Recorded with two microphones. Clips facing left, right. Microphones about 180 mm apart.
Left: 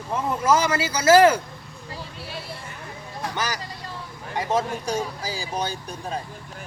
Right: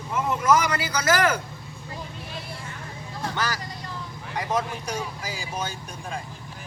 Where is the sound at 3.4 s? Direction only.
20° left (ahead or behind); by 6.2 s 35° left (ahead or behind).